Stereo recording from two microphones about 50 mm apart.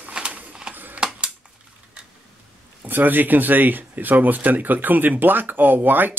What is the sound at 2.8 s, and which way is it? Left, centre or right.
Speech, right.